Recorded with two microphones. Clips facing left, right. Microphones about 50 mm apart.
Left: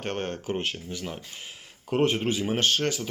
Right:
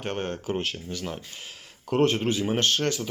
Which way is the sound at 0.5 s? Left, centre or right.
Left.